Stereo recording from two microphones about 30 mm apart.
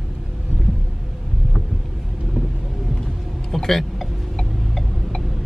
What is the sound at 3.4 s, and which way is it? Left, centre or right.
Vehicle, centre.